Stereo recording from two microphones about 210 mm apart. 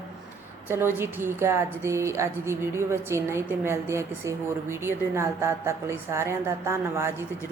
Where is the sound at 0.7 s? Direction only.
10° right (ahead or behind).